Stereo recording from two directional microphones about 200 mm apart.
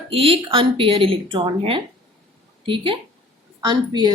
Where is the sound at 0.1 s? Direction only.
25° right (ahead or behind).